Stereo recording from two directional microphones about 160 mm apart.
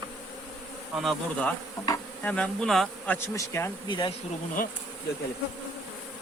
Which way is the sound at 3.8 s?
30° left (ahead or behind).